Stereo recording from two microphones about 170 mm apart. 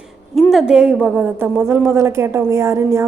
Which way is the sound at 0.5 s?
5° right (ahead or behind).